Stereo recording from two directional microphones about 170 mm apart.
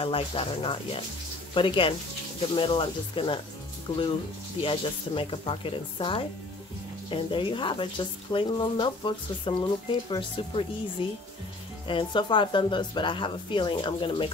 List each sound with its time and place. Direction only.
0.0 s speech: 35° left (ahead or behind)
4.6 s speech: 30° left (ahead or behind)